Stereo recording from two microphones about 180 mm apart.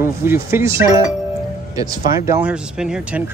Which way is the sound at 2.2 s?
10° right (ahead or behind).